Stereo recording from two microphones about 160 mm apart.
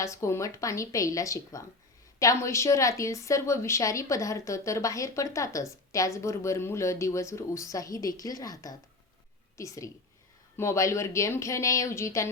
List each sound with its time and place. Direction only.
0.0 s a woman's voice: 20° left (ahead or behind)